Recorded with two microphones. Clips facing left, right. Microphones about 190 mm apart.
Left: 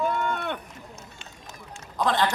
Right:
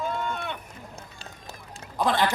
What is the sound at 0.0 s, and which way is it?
Rowboat, 60° left (ahead or behind).